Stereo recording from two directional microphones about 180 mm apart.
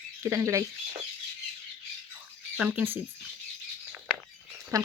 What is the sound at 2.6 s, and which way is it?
Speech, 10° right (ahead or behind).